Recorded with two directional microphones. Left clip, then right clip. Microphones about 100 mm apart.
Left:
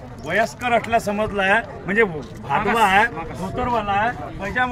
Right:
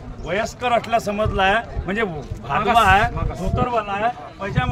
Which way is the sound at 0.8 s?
20° right (ahead or behind).